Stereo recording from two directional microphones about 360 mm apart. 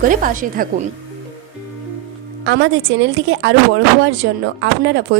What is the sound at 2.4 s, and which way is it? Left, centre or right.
A woman's voice, right.